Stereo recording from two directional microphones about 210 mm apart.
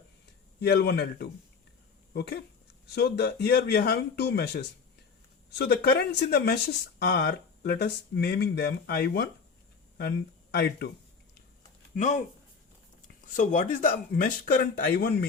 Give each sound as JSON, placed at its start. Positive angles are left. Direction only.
{"t": 0.6, "sound": "speech", "side_deg": 50}
{"t": 11.9, "sound": "speech", "side_deg": 35}
{"t": 13.2, "sound": "speech", "side_deg": 40}